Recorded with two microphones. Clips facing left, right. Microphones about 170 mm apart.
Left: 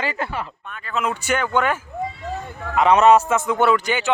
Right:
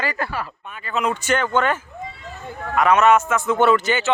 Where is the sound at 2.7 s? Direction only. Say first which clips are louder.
Left 2 dB; 25° left (ahead or behind).